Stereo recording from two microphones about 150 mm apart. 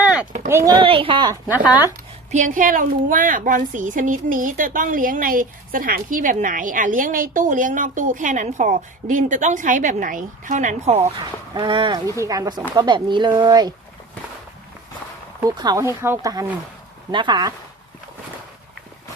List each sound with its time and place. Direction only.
0.4 s speech: 20° right (ahead or behind)
0.8 s speech: 35° right (ahead or behind)
1.5 s speech: 10° right (ahead or behind)
2.3 s a woman's voice: 60° right (ahead or behind)
11.5 s speech: 35° right (ahead or behind)
15.4 s speech: 25° right (ahead or behind)